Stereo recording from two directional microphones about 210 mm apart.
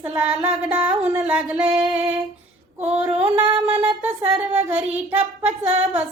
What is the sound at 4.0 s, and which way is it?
Music, 10° right (ahead or behind).